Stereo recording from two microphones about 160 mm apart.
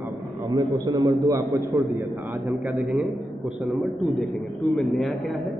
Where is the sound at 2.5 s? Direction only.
5° right (ahead or behind).